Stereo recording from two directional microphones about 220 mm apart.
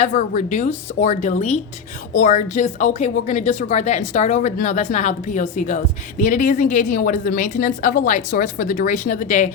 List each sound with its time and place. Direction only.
0.0 s a woman's voice: 35° left (ahead or behind)